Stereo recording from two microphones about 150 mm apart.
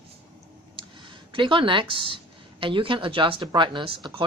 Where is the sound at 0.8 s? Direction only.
35° right (ahead or behind).